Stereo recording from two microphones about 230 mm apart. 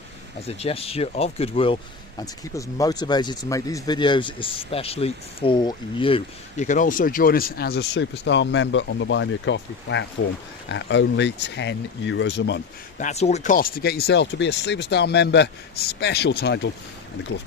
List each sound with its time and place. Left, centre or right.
0.4 s speech: left
13.0 s speech: left